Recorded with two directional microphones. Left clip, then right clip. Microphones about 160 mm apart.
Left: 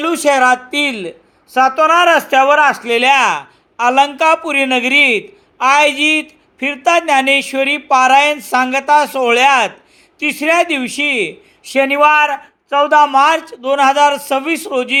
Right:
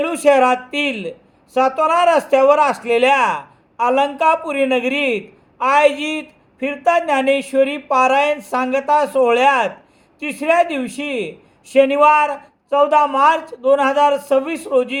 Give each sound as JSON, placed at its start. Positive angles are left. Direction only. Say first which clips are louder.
{"t": 0.0, "sound": "speech", "louder": "left 2 dB", "side_deg": 25}